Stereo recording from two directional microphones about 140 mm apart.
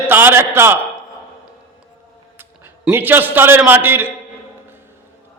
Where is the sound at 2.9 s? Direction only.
15° right (ahead or behind).